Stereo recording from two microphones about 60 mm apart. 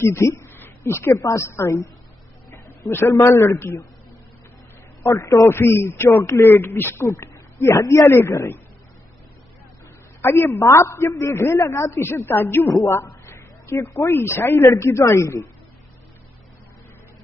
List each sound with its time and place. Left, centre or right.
0.0 s speech: left
0.6 s a sound: left
1.3 s a man's voice: left
2.5 s a sound: left
2.9 s a man's voice: left
3.2 s a man's voice: left
5.0 s a man's voice: left
5.5 s a man's voice: left
7.2 s a man's voice: left
10.2 s a man's voice: left
12.0 s a man's voice: left
12.8 s a woman's voice: left